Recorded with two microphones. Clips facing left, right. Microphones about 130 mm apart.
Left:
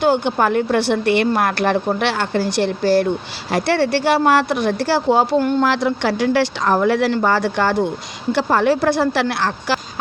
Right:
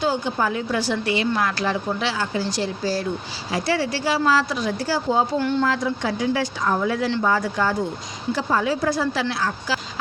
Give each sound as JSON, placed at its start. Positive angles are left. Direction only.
{"t": 0.0, "sound": "a woman's voice", "side_deg": 65}
{"t": 5.4, "sound": "speech", "side_deg": 45}
{"t": 5.6, "sound": "a woman's voice", "side_deg": 75}